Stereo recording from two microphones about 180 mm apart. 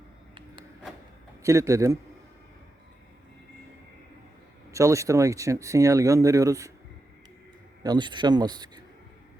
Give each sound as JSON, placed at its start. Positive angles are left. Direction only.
{"t": 1.4, "sound": "a man's voice", "side_deg": -15}
{"t": 4.7, "sound": "speech", "side_deg": -15}
{"t": 7.9, "sound": "speech", "side_deg": -25}